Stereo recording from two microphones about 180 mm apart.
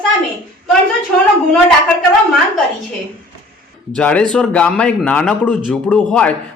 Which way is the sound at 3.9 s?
5° left (ahead or behind).